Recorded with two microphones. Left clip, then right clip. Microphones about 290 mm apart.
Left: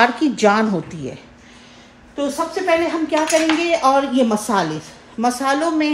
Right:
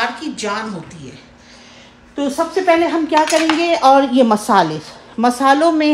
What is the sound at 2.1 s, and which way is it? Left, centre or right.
A woman's voice, right.